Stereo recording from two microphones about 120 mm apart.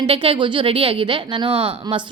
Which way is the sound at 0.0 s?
50° right (ahead or behind).